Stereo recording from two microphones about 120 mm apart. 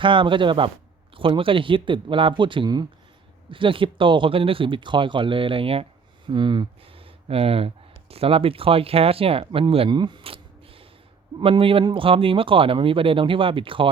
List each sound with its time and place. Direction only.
0.0 s speech: 45° right (ahead or behind)